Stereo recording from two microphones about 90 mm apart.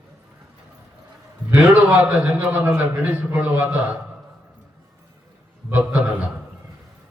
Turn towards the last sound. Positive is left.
turn(degrees=-15)  # may be behind; listen again after turning